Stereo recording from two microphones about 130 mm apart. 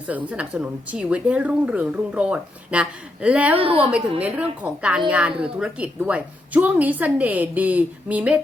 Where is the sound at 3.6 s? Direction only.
45° right (ahead or behind).